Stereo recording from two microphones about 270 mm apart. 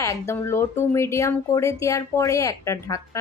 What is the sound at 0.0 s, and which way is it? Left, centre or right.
Speech, centre.